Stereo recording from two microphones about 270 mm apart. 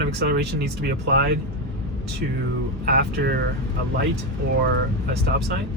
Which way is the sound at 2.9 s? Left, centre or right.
Right.